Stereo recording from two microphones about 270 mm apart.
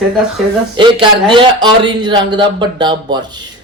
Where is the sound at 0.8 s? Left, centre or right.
Centre.